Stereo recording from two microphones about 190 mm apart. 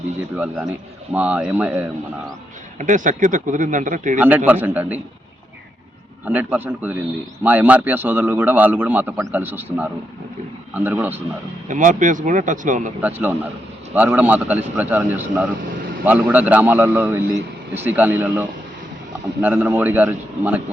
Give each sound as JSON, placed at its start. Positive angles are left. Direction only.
{"t": 0.3, "sound": "a man's voice", "side_deg": -10}
{"t": 2.7, "sound": "speech", "side_deg": -40}
{"t": 4.2, "sound": "a man's voice", "side_deg": -10}
{"t": 6.2, "sound": "a man's voice", "side_deg": -10}
{"t": 11.7, "sound": "speech", "side_deg": -40}
{"t": 13.0, "sound": "a man's voice", "side_deg": -10}